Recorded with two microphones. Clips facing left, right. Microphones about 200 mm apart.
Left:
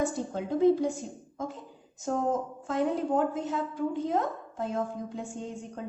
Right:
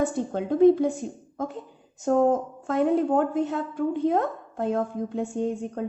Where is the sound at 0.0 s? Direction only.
60° right (ahead or behind).